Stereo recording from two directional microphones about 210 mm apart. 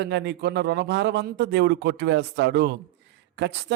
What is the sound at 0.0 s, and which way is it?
A man's voice, 55° right (ahead or behind).